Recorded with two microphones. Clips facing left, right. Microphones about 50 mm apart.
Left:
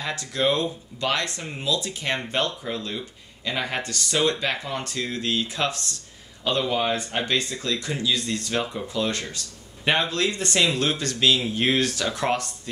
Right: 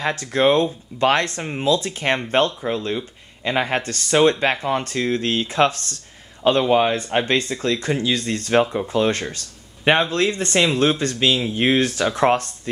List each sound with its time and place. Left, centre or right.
0.0 s speech: right